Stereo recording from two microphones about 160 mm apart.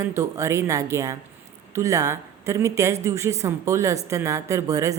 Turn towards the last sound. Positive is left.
turn(degrees=-20)  # may be behind; listen again after turning